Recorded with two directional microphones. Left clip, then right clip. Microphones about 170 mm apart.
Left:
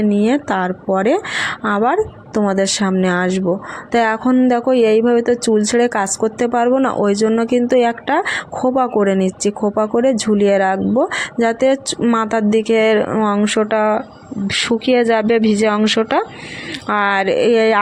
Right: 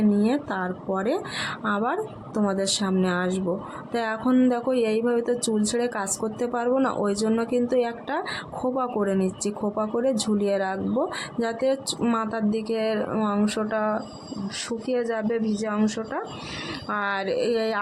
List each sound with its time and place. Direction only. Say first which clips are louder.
0.0 s speech: left 8 dB; 35° left (ahead or behind)
11.9 s speech: left 9 dB; 25° left (ahead or behind)
12.2 s speech: left 12 dB; 40° left (ahead or behind)